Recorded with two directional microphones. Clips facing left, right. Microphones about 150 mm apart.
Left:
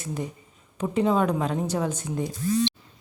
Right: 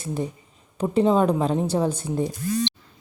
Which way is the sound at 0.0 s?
30° right (ahead or behind).